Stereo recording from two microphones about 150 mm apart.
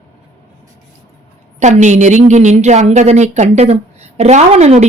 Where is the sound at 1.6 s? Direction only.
50° right (ahead or behind).